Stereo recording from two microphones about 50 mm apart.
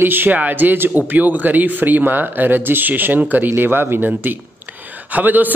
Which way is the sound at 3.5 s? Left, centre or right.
Right.